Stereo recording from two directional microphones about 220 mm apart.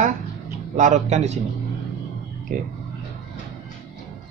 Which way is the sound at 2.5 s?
40° right (ahead or behind).